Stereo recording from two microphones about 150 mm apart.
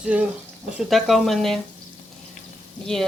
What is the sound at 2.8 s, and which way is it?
Speech, 5° left (ahead or behind).